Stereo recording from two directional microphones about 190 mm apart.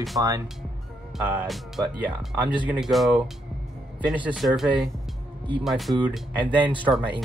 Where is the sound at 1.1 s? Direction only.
5° right (ahead or behind).